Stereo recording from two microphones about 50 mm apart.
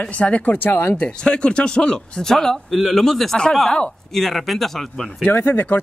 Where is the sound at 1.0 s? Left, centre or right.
Left; by 5.1 s centre.